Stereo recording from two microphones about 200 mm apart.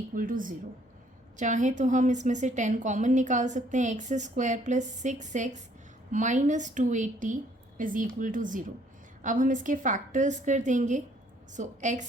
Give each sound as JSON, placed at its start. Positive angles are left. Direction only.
{"t": 0.1, "sound": "a woman's voice", "side_deg": -45}